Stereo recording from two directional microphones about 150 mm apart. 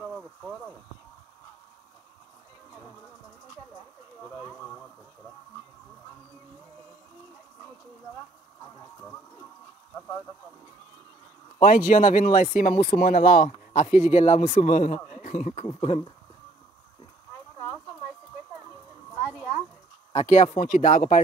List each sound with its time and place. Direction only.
0.0 s a sound: centre (ahead or behind)
11.6 s speech: 60° left (ahead or behind)
15.6 s speech: 40° left (ahead or behind)
20.1 s speech: 45° left (ahead or behind)